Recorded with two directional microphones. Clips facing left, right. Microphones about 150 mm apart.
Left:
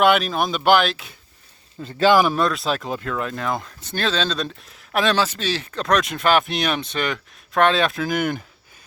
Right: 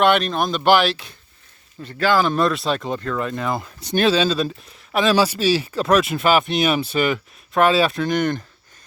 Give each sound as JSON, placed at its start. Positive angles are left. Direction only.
{"t": 0.0, "sound": "speech", "side_deg": 5}
{"t": 2.0, "sound": "speech", "side_deg": 15}
{"t": 2.3, "sound": "speech", "side_deg": 0}
{"t": 3.8, "sound": "speech", "side_deg": -15}
{"t": 5.1, "sound": "speech", "side_deg": -10}